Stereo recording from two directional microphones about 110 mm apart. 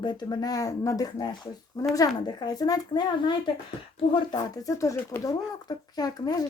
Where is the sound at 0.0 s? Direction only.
40° left (ahead or behind).